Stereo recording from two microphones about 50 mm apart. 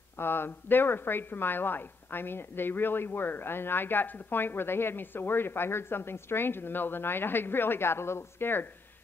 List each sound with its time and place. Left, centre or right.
0.2 s a woman's voice: left